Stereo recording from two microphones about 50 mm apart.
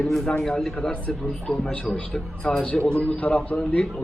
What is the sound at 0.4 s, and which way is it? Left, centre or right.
Speech, centre.